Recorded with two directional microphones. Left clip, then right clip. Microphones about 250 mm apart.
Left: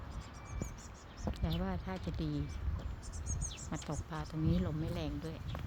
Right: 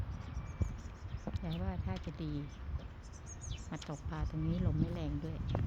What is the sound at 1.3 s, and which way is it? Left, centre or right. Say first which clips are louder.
Speech: left 4 dB; centre.